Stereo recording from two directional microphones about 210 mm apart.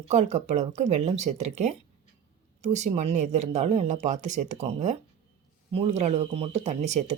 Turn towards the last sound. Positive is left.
turn(degrees=-30)  # may be behind; listen again after turning